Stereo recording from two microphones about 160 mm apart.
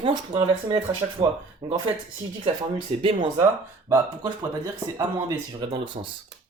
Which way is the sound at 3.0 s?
30° right (ahead or behind).